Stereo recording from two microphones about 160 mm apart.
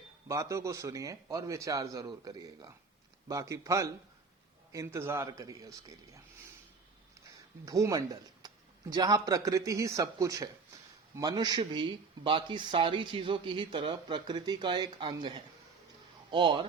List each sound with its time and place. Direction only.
0.3 s speech: 20° right (ahead or behind)
7.6 s speech: 20° right (ahead or behind)